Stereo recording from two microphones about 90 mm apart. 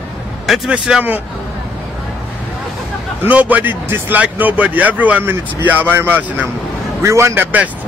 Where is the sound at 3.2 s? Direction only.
20° right (ahead or behind).